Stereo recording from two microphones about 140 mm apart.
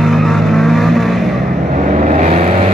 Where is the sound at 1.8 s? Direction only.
65° right (ahead or behind).